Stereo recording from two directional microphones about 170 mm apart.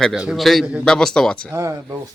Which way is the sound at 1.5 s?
15° right (ahead or behind).